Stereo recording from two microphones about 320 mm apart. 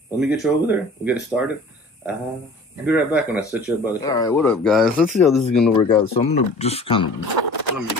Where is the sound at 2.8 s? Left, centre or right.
Centre.